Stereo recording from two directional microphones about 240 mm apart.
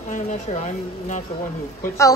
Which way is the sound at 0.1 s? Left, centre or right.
Left.